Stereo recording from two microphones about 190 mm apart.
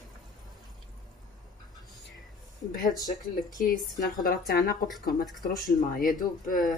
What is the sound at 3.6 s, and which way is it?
Speech, 50° left (ahead or behind).